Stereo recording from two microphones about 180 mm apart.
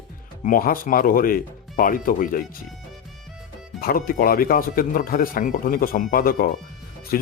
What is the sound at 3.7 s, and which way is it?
Speech, 55° left (ahead or behind).